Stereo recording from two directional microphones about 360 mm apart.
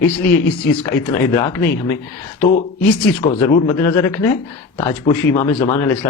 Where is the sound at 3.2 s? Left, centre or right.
Centre.